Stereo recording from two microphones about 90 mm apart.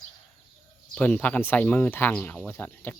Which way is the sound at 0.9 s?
15° left (ahead or behind).